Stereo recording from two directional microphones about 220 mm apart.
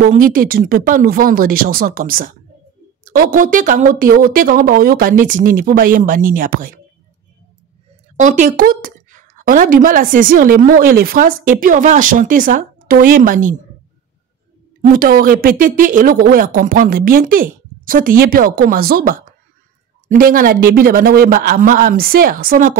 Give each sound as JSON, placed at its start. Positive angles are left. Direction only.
{"t": 0.0, "sound": "a woman's voice", "side_deg": -40}
{"t": 8.2, "sound": "a woman's voice", "side_deg": -35}
{"t": 14.8, "sound": "a woman's voice", "side_deg": -40}